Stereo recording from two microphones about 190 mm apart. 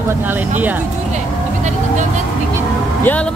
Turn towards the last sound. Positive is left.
turn(degrees=10)  # may be behind; listen again after turning